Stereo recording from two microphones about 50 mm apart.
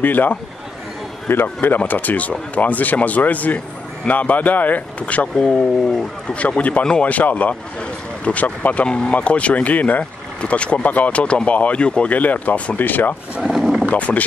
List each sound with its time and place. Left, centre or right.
0.0 s speech: left
1.9 s speech: left
10.4 s speech: left
13.6 s a sound: centre
13.8 s speech: left